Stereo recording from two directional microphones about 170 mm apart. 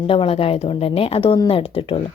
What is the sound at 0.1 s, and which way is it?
A woman's voice, 35° left (ahead or behind).